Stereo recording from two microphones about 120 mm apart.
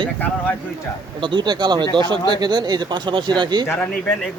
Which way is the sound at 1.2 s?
40° right (ahead or behind).